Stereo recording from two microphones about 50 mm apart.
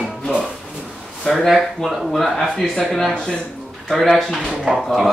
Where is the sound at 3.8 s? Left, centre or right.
Centre.